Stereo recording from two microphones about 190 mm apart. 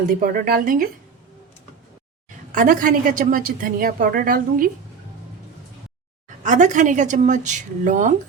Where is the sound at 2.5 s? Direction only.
45° right (ahead or behind).